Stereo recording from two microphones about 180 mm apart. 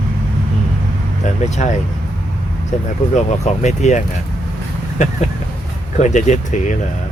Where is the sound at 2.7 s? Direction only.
40° left (ahead or behind).